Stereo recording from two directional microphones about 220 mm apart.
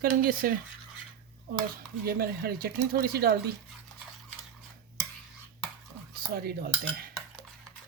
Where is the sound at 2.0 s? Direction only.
45° right (ahead or behind).